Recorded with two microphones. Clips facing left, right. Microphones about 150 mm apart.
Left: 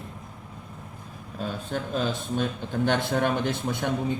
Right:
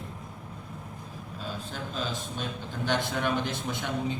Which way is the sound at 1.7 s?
50° left (ahead or behind).